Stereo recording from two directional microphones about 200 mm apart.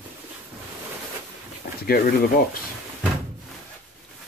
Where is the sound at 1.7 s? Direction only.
50° left (ahead or behind).